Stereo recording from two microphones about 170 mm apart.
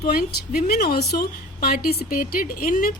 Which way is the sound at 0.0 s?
65° left (ahead or behind).